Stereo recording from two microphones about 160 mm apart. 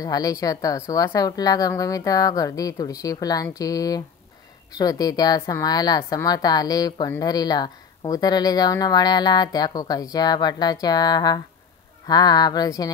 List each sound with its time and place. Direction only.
0.0 s a woman's voice: 25° left (ahead or behind)